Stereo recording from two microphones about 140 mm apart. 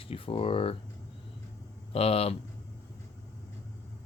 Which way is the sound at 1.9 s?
45° left (ahead or behind).